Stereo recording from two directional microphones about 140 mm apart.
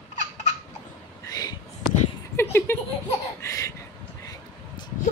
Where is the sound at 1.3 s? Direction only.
30° left (ahead or behind).